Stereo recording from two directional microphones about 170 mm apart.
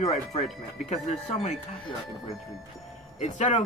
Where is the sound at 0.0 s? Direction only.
40° left (ahead or behind).